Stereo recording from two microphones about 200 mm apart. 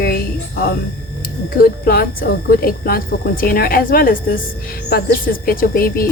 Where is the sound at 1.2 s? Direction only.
45° left (ahead or behind).